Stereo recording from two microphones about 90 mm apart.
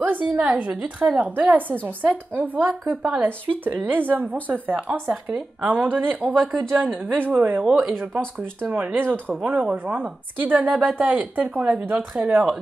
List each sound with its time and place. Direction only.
0.0 s speech: 20° right (ahead or behind)
5.0 s speech: 10° right (ahead or behind)
6.4 s speech: 5° left (ahead or behind)
6.7 s speech: 20° right (ahead or behind)
7.6 s speech: 10° right (ahead or behind)
8.6 s speech: 20° right (ahead or behind)